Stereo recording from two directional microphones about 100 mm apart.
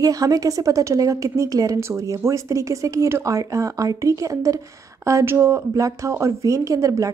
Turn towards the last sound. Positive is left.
turn(degrees=-35)  # may be behind; listen again after turning